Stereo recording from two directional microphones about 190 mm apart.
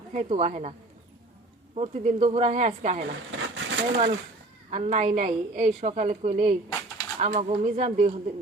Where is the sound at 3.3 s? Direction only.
85° right.